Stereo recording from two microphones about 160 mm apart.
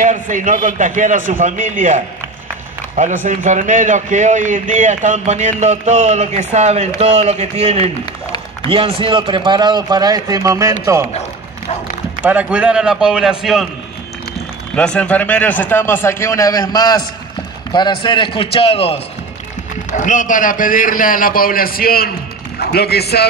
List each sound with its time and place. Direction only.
0.0 s a man's voice: 50° right (ahead or behind)
3.0 s a man's voice: 50° right (ahead or behind); by 11.1 s 20° right (ahead or behind)
12.2 s a man's voice: 10° right (ahead or behind)
14.8 s a man's voice: 10° left (ahead or behind); by 18.9 s 35° left (ahead or behind)
20.0 s a man's voice: 55° left (ahead or behind); by 22.1 s 70° left (ahead or behind)
22.6 s a man's voice: 80° left